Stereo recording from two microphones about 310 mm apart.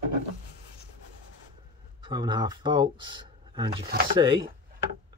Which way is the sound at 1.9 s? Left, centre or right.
Centre.